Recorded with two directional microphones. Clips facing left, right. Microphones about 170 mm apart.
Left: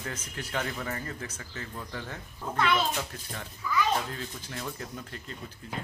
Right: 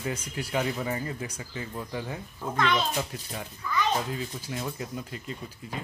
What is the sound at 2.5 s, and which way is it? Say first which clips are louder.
Speech: right 1 dB; 10° left (ahead or behind).